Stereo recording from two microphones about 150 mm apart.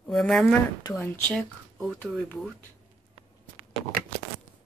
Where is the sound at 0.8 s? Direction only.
15° left (ahead or behind).